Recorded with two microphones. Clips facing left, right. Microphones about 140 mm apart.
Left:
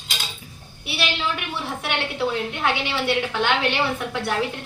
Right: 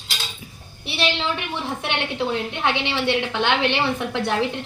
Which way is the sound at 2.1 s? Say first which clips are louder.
Even; 25° right (ahead or behind).